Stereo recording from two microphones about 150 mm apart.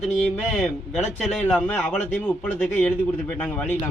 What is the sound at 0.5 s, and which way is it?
Speech, centre (ahead or behind).